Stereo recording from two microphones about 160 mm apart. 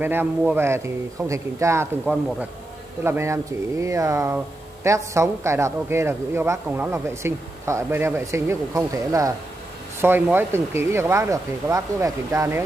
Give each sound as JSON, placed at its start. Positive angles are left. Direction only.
{"t": 0.0, "sound": "a man's voice", "side_deg": -15}
{"t": 3.0, "sound": "a man's voice", "side_deg": -15}